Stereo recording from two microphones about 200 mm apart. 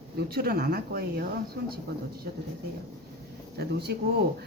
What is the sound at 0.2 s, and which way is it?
A woman's voice, 50° right (ahead or behind).